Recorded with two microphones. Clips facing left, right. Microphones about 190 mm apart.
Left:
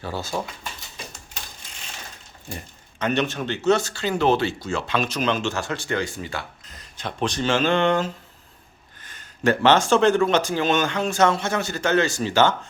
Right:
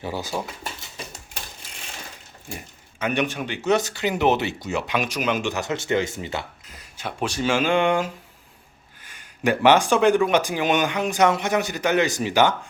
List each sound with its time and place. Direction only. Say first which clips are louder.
0.0 s speech: even; 15° right (ahead or behind)
2.5 s speech: left 1 dB; 10° right (ahead or behind)
6.7 s speech: even; 10° right (ahead or behind)